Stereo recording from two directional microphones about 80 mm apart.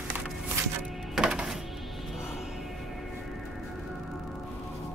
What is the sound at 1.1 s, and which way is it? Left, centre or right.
Music, centre.